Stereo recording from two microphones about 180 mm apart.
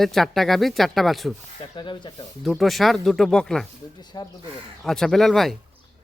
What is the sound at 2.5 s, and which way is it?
Speech, centre (ahead or behind).